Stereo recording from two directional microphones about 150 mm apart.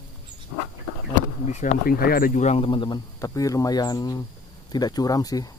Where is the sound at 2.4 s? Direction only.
40° left (ahead or behind); by 5.5 s 25° left (ahead or behind).